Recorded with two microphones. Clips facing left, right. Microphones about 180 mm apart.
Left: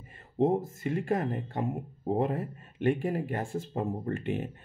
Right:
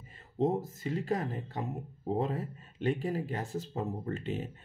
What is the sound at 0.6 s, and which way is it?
Speech, 55° left (ahead or behind).